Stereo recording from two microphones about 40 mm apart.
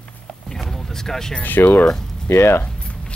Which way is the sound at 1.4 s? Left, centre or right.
Left.